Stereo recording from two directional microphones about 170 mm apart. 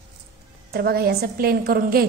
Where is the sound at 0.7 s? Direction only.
65° right (ahead or behind).